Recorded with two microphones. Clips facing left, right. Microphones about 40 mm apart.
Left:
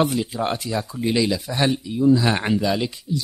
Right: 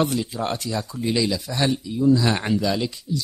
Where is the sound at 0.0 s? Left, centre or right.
Centre.